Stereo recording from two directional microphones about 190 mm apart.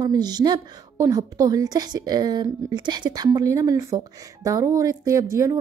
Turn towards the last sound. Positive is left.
turn(degrees=-15)  # may be behind; listen again after turning